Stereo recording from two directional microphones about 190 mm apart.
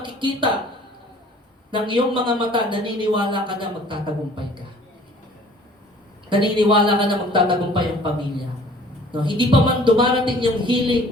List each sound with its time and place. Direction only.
0.0 s a sound: 25° right (ahead or behind)
1.7 s speech: 25° right (ahead or behind)
6.2 s speech: 25° right (ahead or behind)
9.1 s speech: 25° right (ahead or behind)